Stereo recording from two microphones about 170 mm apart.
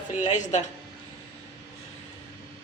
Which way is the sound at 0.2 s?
45° left (ahead or behind).